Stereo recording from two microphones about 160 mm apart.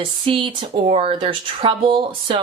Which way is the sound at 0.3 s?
30° right (ahead or behind).